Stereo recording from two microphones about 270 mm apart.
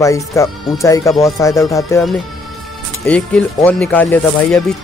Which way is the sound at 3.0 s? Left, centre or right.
Centre.